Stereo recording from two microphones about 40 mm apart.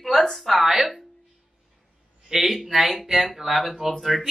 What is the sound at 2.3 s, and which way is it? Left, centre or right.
Speech, centre.